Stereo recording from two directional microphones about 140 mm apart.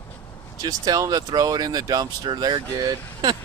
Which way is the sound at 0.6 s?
25° right (ahead or behind).